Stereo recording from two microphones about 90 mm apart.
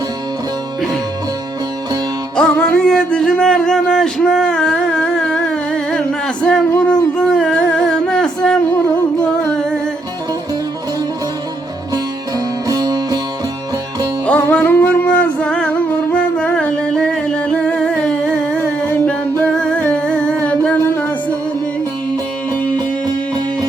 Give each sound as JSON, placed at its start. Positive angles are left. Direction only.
{"t": 2.3, "sound": "music", "side_deg": 10}
{"t": 12.6, "sound": "music", "side_deg": -45}
{"t": 14.5, "sound": "music", "side_deg": 15}
{"t": 18.9, "sound": "music", "side_deg": 20}